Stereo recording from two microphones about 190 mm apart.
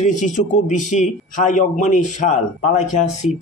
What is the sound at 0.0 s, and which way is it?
A man's voice, 40° left (ahead or behind).